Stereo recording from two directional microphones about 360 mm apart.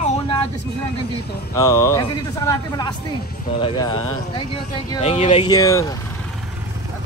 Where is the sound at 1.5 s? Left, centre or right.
Centre.